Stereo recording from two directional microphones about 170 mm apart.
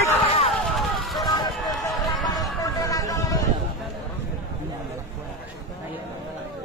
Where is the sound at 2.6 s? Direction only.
20° left (ahead or behind).